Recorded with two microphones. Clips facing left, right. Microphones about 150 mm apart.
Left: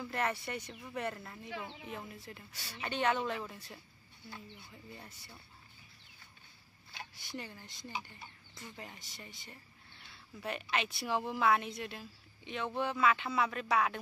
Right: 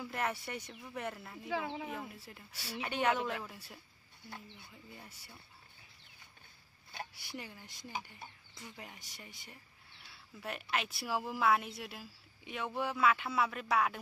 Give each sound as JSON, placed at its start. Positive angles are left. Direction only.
{"t": 0.0, "sound": "speech", "side_deg": -5}
{"t": 1.5, "sound": "speech", "side_deg": -90}
{"t": 2.1, "sound": "speech", "side_deg": -5}
{"t": 4.9, "sound": "speech", "side_deg": -10}
{"t": 7.2, "sound": "speech", "side_deg": -10}